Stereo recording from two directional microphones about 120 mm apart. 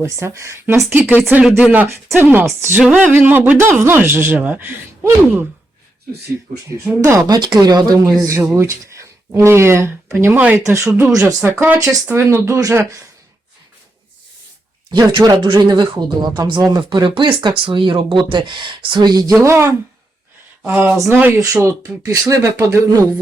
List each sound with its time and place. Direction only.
0.0 s speech: 25° right (ahead or behind)
7.0 s speech: 25° right (ahead or behind)
14.8 s speech: 35° right (ahead or behind)
19.4 s speech: 25° right (ahead or behind)
21.3 s speech: 30° right (ahead or behind)